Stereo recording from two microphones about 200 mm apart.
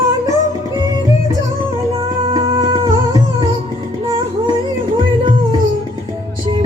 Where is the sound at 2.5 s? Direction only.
20° right (ahead or behind).